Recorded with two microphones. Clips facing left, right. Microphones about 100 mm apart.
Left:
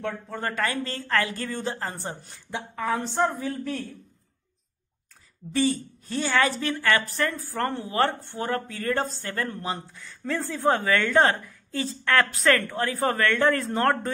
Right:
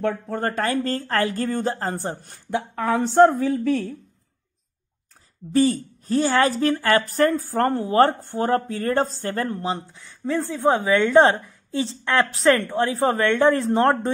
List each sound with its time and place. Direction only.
0.0 s speech: 50° right (ahead or behind)
2.5 s a man's voice: 65° right (ahead or behind)
5.5 s a woman's voice: 40° right (ahead or behind); by 14.1 s 25° right (ahead or behind)